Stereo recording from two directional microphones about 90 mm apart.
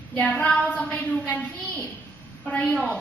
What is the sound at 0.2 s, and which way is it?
A woman's voice, 15° left (ahead or behind).